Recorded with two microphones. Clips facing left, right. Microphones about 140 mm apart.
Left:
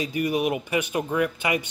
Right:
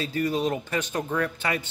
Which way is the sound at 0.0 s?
15° left (ahead or behind).